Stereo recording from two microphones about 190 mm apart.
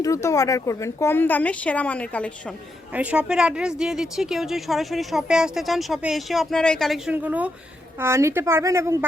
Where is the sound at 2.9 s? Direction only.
5° right (ahead or behind).